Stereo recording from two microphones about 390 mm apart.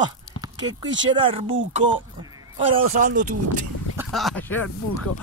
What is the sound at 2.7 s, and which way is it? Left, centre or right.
Speech, centre.